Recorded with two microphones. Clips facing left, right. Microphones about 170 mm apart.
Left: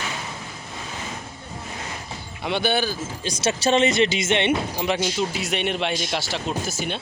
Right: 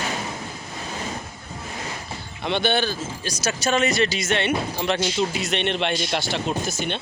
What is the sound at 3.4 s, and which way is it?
Speech, 30° left (ahead or behind).